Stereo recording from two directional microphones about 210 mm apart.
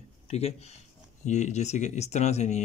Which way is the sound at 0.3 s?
30° left (ahead or behind).